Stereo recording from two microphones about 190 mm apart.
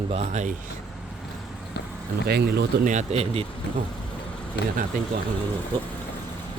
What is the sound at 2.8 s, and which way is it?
Speech, 40° right (ahead or behind).